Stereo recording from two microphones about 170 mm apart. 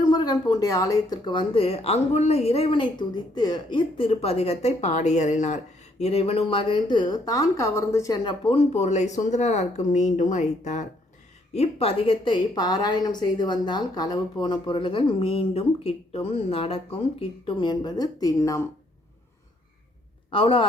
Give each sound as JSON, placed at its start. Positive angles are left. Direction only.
{"t": 0.0, "sound": "a woman's voice", "side_deg": 25}
{"t": 20.3, "sound": "speech", "side_deg": 30}